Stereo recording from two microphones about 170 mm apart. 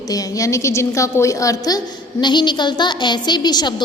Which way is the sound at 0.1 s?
20° left (ahead or behind).